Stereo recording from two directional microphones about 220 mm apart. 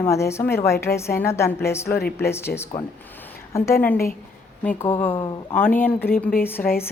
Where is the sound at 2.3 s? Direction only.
10° left (ahead or behind).